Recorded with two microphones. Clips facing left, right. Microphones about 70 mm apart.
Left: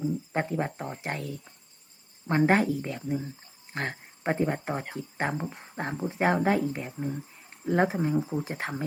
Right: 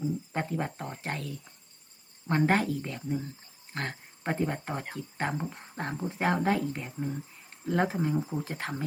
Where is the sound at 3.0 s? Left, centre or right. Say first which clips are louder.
Left 2 dB; centre.